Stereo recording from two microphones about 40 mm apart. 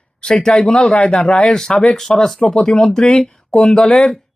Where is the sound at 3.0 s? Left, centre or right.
Left.